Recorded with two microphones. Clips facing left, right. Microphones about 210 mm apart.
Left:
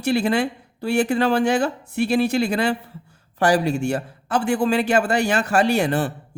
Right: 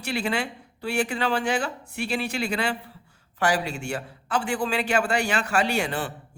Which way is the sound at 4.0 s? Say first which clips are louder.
Left 5 dB; 40° left (ahead or behind).